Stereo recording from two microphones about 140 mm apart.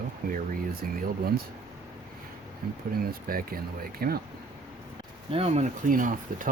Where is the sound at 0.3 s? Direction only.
85° right.